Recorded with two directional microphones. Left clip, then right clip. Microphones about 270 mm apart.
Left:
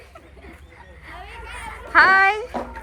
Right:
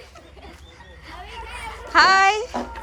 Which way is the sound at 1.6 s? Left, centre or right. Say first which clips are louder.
Left 1 dB; centre.